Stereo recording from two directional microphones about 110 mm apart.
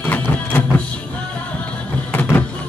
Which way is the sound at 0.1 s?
15° left (ahead or behind).